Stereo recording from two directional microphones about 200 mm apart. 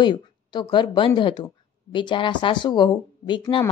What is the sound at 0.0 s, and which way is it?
Speech, 20° left (ahead or behind).